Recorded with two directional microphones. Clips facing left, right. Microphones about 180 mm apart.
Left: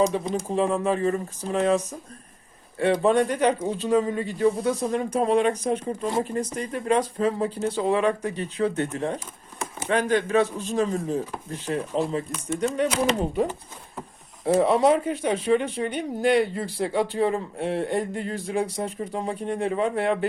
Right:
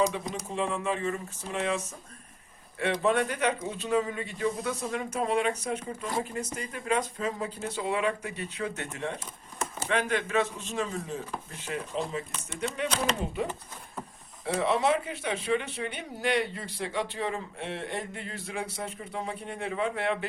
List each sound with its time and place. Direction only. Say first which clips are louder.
0.4 s speech: left 6 dB; 35° left (ahead or behind)